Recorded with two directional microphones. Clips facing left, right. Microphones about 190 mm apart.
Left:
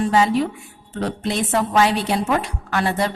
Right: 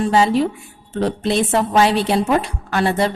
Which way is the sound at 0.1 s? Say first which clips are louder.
Right 2 dB; 30° right (ahead or behind).